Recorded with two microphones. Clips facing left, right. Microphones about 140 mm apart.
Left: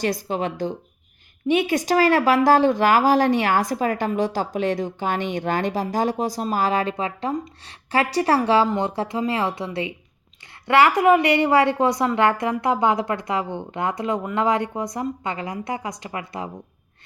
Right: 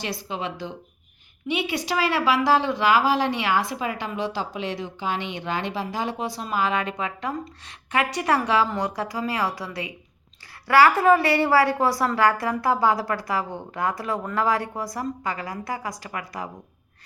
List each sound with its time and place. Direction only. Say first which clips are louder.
0.0 s a woman's voice: left 6 dB; 45° left (ahead or behind); by 16.5 s 25° left (ahead or behind)